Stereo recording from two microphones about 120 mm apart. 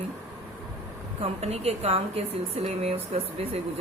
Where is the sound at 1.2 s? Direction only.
60° right (ahead or behind).